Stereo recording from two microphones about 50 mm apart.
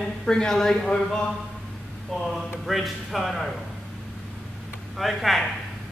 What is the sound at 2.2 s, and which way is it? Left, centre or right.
Speech, centre.